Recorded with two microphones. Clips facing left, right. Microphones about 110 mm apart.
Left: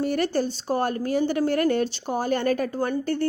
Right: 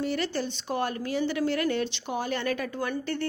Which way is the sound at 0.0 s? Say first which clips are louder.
Left 5 dB; 45° left (ahead or behind).